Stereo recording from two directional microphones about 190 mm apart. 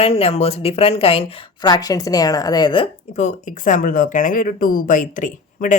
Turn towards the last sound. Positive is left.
turn(degrees=40)  # may be behind; listen again after turning